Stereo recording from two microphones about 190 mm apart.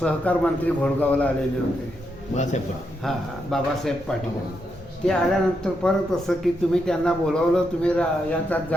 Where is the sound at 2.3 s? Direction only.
35° left (ahead or behind).